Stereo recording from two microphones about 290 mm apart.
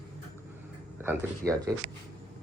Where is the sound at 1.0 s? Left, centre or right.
Centre.